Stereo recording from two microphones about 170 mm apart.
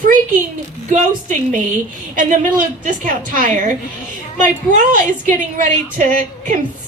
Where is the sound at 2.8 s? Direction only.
55° right (ahead or behind).